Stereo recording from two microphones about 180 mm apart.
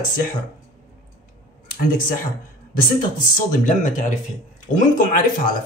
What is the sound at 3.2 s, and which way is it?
Speech, 50° left (ahead or behind).